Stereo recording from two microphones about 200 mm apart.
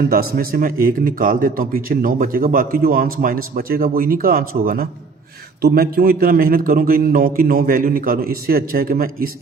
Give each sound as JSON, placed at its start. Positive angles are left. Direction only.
{"t": 0.1, "sound": "a man's voice", "side_deg": -45}